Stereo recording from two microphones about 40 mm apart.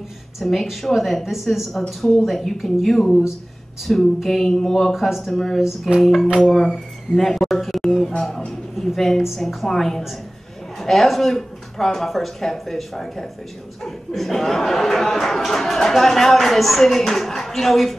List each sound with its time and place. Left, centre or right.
0.4 s speech: centre
2.2 s speech: centre
5.1 s speech: centre
5.6 s a sound: centre
5.9 s speech: centre
9.7 s speech: centre